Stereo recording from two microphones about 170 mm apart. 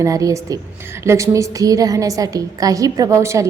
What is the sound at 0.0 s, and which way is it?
A woman's voice, 20° right (ahead or behind).